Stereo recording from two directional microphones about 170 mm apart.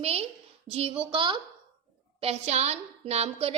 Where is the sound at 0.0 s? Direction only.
35° right (ahead or behind).